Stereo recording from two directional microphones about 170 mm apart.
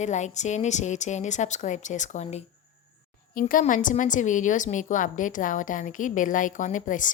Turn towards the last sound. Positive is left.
turn(degrees=50)  # may be behind; listen again after turning